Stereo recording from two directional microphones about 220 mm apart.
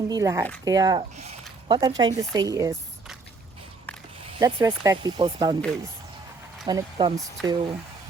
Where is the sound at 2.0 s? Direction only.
15° right (ahead or behind).